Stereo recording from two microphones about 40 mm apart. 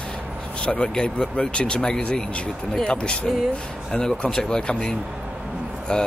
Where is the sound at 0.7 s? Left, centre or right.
Left.